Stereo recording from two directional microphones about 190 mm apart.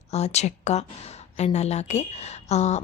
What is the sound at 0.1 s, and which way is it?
A woman's voice, 35° left (ahead or behind).